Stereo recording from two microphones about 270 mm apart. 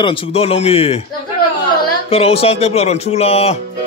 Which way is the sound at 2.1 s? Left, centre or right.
Left.